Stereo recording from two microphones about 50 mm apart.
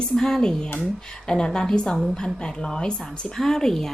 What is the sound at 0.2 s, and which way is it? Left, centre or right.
Speech, centre.